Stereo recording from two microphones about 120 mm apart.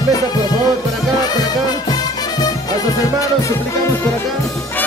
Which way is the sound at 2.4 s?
30° left (ahead or behind).